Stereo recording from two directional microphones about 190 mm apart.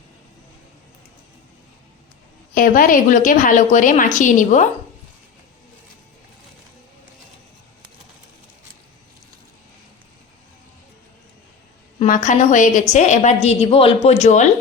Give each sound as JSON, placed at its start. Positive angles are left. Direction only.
{"t": 2.6, "sound": "a woman's voice", "side_deg": 45}
{"t": 11.9, "sound": "a woman's voice", "side_deg": 45}